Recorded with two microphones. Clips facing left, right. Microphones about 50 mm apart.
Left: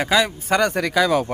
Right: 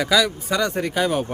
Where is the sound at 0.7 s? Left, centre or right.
Left.